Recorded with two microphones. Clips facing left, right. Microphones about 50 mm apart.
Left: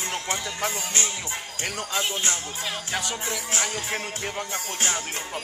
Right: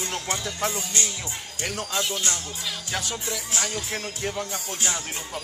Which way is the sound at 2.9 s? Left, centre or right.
Centre.